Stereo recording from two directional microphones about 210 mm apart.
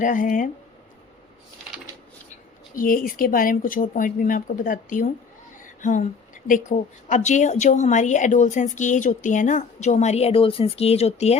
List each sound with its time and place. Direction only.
0.0 s speech: 40° left (ahead or behind)
2.7 s speech: 40° left (ahead or behind)